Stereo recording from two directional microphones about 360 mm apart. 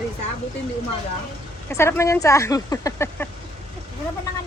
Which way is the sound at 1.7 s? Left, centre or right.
Centre.